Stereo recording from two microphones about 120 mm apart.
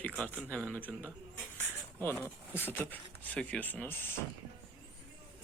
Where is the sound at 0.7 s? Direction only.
15° left (ahead or behind).